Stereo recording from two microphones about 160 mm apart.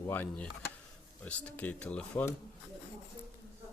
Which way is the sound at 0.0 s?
10° left (ahead or behind).